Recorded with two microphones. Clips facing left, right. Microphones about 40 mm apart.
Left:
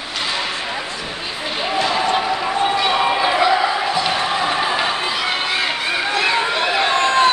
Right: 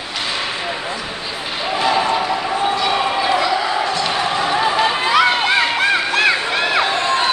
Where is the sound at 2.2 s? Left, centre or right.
Centre.